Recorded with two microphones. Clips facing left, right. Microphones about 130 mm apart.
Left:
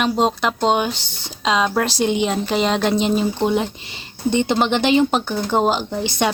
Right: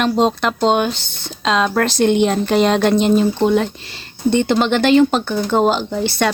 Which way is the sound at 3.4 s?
15° left (ahead or behind).